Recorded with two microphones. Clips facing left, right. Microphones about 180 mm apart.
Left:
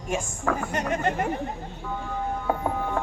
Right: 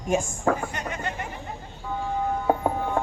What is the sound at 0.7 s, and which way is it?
Speech, 45° left (ahead or behind).